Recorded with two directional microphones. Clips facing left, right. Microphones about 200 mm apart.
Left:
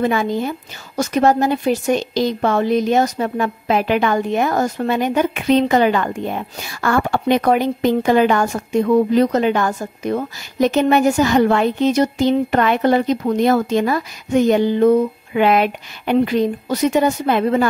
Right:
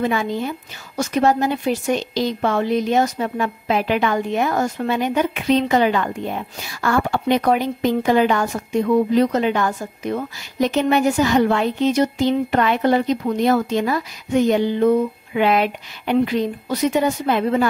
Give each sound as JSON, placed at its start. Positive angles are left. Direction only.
{"t": 0.0, "sound": "a woman's voice", "side_deg": 45}